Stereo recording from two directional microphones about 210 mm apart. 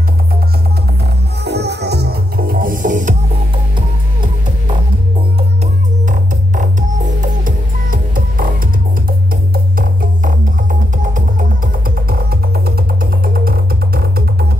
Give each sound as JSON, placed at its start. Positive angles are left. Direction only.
{"t": 1.4, "sound": "music", "side_deg": -50}
{"t": 6.0, "sound": "music", "side_deg": -35}